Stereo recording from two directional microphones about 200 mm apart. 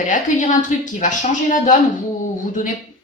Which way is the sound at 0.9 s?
40° left (ahead or behind).